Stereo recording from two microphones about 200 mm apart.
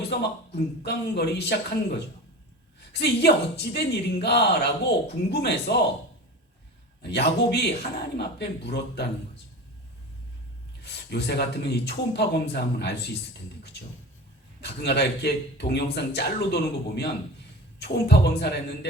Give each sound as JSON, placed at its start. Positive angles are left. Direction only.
{"t": 0.1, "sound": "a woman's voice", "side_deg": 55}
{"t": 2.9, "sound": "a woman's voice", "side_deg": 55}
{"t": 7.0, "sound": "a woman's voice", "side_deg": 55}
{"t": 10.8, "sound": "a woman's voice", "side_deg": 55}
{"t": 14.6, "sound": "a woman's voice", "side_deg": 55}